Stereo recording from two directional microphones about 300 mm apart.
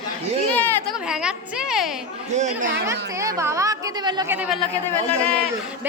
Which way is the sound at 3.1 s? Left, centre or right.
Centre.